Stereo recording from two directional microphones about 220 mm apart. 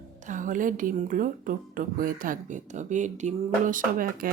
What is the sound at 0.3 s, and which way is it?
A woman's voice, 35° right (ahead or behind).